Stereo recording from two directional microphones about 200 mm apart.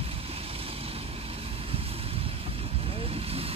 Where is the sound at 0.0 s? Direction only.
30° right (ahead or behind).